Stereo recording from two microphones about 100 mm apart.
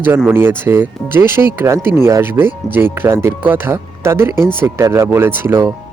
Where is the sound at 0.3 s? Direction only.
25° right (ahead or behind).